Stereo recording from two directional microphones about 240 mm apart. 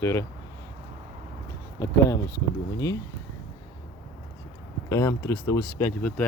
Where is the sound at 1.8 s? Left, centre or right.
Centre.